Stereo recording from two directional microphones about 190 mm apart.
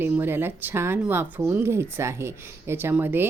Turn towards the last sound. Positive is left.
turn(degrees=-10)  # may be behind; listen again after turning